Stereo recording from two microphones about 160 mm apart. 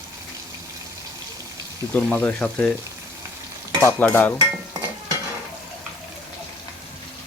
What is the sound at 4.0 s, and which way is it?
Speech, 10° left (ahead or behind).